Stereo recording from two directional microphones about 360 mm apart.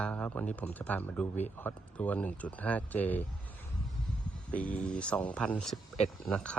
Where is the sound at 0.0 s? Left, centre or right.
Centre.